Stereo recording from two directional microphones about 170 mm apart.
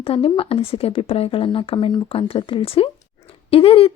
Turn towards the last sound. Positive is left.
turn(degrees=35)  # may be behind; listen again after turning